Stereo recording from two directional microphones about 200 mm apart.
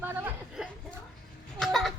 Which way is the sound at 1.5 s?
Centre (ahead or behind).